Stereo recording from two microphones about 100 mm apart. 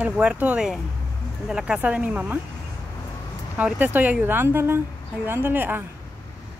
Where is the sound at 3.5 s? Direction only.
15° right (ahead or behind).